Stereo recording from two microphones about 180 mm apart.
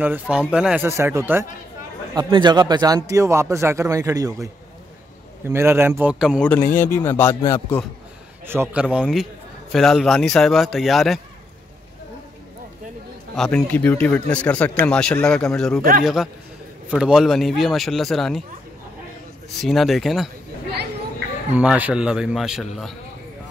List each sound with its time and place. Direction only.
0.0 s speech: 10° right (ahead or behind)
2.1 s a man's voice: 25° right (ahead or behind)
5.5 s speech: 15° right (ahead or behind)
6.5 s a man's voice: 10° left (ahead or behind)
8.5 s a man's voice: 10° right (ahead or behind)
13.3 s a man's voice: 5° left (ahead or behind)
19.6 s a man's voice: centre (ahead or behind)
21.5 s a man's voice: 10° right (ahead or behind)